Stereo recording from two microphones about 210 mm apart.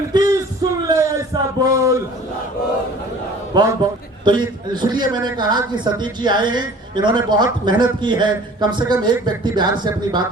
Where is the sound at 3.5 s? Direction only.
20° right (ahead or behind).